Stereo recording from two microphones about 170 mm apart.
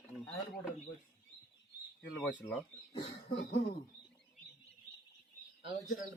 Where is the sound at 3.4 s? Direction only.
65° left (ahead or behind).